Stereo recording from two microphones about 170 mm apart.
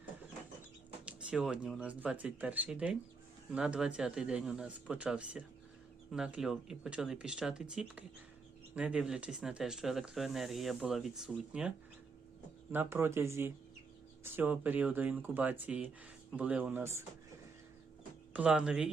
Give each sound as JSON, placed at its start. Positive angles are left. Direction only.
{"t": 1.0, "sound": "speech", "side_deg": -5}
{"t": 12.7, "sound": "speech", "side_deg": -15}
{"t": 18.3, "sound": "speech", "side_deg": -5}